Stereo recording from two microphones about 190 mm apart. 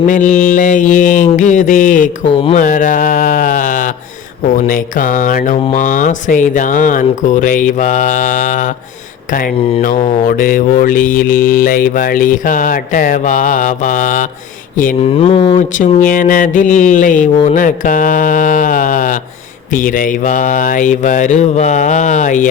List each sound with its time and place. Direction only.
0.0 s speech: 45° left (ahead or behind)
2.6 s sheep: 40° left (ahead or behind)
4.4 s speech: 45° left (ahead or behind)
15.1 s mantra: 30° left (ahead or behind)
15.5 s speech: 45° left (ahead or behind)
19.7 s mantra: 45° left (ahead or behind)